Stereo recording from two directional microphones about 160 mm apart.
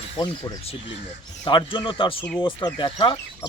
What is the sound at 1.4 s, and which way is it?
Speech, 30° left (ahead or behind).